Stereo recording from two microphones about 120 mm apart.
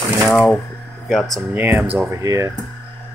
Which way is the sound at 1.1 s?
Centre (ahead or behind).